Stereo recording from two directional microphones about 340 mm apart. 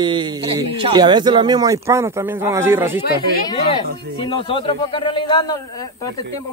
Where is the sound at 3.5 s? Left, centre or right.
Centre.